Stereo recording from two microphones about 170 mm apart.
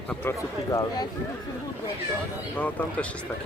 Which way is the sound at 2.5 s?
10° left (ahead or behind).